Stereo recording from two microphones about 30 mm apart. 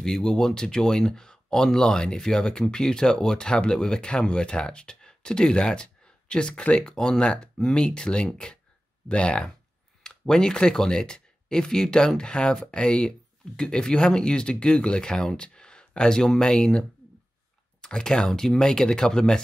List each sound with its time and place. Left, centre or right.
0.0 s speech: left
10.0 s a sound: left
10.5 s speech: left
15.3 s a sound: left
16.3 s speech: left
17.8 s speech: left